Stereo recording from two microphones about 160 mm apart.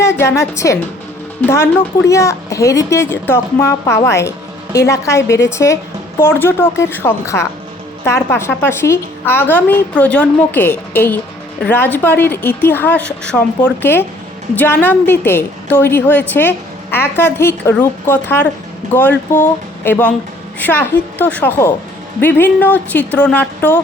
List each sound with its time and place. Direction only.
0.0 s speech: 15° left (ahead or behind)